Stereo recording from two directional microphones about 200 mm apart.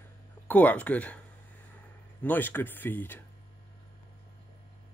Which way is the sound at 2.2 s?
10° left (ahead or behind).